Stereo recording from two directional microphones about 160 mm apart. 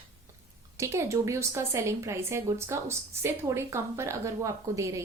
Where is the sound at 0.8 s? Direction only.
20° right (ahead or behind).